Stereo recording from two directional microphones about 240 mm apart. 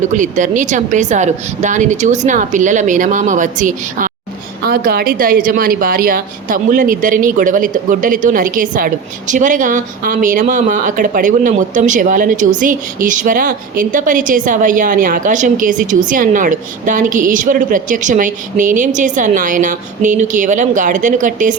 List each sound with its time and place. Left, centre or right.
0.1 s a woman's voice: right